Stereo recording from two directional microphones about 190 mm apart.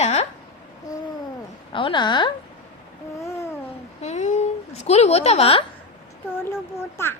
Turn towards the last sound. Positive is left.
turn(degrees=10)  # may be behind; listen again after turning